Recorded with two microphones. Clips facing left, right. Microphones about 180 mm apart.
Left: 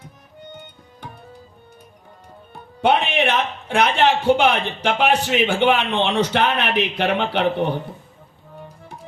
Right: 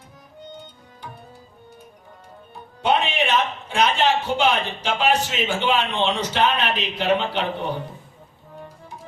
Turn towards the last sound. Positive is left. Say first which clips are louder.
# left 5 dB
turn(degrees=60)  # may be behind; listen again after turning